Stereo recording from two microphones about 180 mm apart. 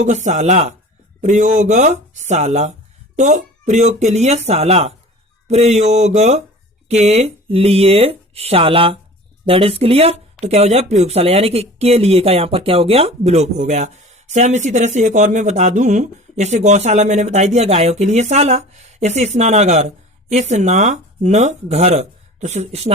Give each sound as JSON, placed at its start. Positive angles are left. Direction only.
{"t": 0.0, "sound": "speech", "side_deg": -40}